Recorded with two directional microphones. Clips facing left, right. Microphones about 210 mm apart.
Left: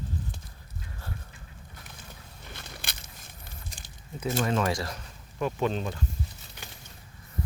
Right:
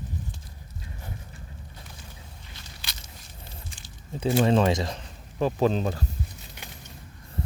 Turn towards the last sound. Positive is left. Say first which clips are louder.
# right 5 dB
turn(degrees=-35)  # may be behind; listen again after turning